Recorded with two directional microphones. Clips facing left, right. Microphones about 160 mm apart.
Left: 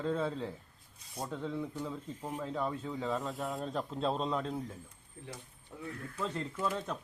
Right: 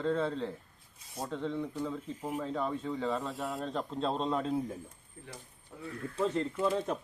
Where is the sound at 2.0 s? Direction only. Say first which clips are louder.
Right 4 dB; 10° right (ahead or behind).